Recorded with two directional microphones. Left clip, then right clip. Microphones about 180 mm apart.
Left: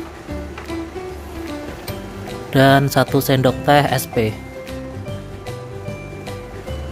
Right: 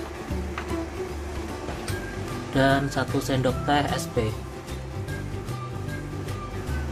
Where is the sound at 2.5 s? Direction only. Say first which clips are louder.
Left 9 dB; 55° left (ahead or behind).